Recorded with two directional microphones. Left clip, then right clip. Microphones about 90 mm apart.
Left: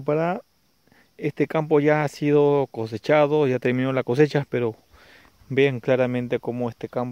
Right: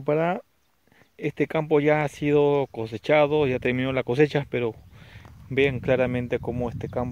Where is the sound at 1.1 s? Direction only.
25° left (ahead or behind).